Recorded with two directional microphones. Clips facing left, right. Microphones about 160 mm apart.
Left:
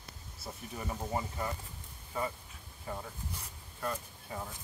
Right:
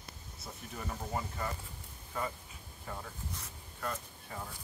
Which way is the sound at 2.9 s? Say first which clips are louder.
Left 2 dB; 10° left (ahead or behind).